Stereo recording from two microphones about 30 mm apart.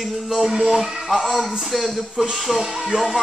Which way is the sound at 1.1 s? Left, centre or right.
Centre.